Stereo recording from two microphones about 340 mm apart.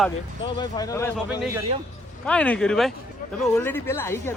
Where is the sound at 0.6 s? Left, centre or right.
Centre.